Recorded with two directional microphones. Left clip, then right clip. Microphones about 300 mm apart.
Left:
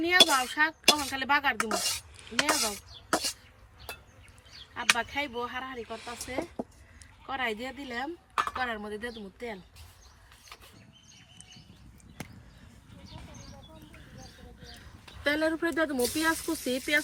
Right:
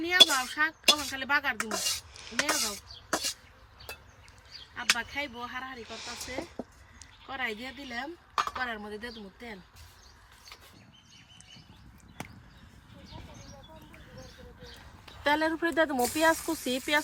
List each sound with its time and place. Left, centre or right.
0.0 s speech: centre
4.7 s speech: centre
15.2 s speech: centre